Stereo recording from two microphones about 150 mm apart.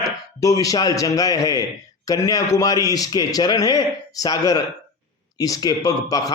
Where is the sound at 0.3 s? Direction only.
20° left (ahead or behind).